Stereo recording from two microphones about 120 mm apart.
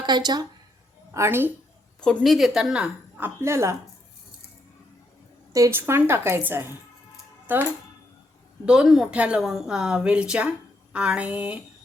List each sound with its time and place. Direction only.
0.0 s speech: 35° right (ahead or behind)
1.1 s a woman's voice: 20° right (ahead or behind)
2.0 s a woman's voice: centre (ahead or behind); by 3.8 s 20° right (ahead or behind)
5.5 s a woman's voice: 25° right (ahead or behind)